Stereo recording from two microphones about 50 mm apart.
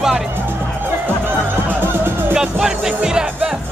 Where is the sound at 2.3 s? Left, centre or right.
Centre.